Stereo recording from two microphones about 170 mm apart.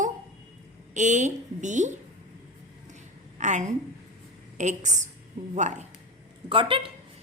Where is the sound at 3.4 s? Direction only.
45° right (ahead or behind).